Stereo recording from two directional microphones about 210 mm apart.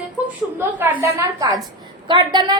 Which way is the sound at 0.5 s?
10° right (ahead or behind).